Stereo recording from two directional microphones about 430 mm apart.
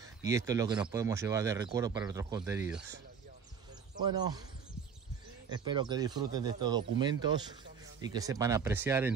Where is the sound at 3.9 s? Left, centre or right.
Centre.